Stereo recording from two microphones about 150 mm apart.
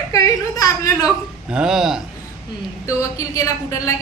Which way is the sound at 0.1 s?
25° left (ahead or behind).